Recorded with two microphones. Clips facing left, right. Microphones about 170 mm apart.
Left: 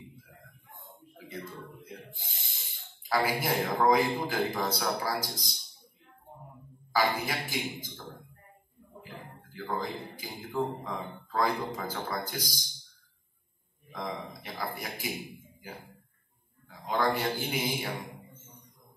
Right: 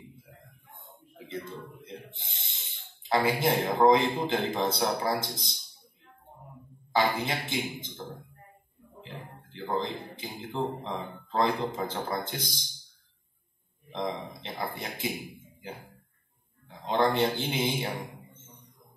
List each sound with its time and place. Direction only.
0.8 s speech: 25° right (ahead or behind)
6.9 s speech: 25° right (ahead or behind)
9.0 s speech: 25° right (ahead or behind)
13.8 s a man's voice: 25° right (ahead or behind)